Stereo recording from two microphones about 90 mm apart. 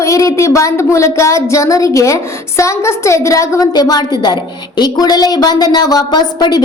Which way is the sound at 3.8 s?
50° left (ahead or behind).